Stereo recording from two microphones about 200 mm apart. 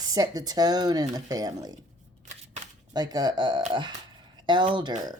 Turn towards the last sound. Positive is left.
turn(degrees=-20)  # may be behind; listen again after turning